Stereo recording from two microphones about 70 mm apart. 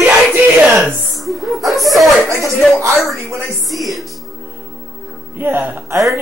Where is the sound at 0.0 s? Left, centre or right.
Right.